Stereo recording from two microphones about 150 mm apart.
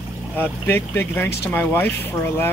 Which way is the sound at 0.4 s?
15° left (ahead or behind).